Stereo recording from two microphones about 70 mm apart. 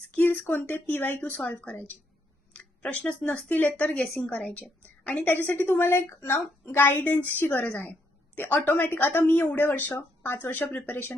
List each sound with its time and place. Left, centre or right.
0.1 s a woman's voice: centre
2.5 s a sound: centre
3.1 s a woman's voice: centre